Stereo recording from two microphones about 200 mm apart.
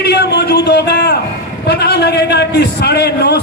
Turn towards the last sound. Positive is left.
turn(degrees=55)  # may be behind; listen again after turning